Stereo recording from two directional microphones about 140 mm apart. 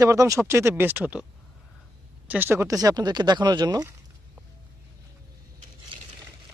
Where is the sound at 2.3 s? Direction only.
15° right (ahead or behind).